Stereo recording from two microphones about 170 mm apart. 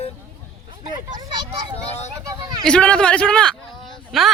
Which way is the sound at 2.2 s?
25° right (ahead or behind).